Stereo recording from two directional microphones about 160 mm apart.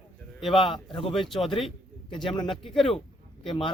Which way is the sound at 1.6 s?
30° left (ahead or behind).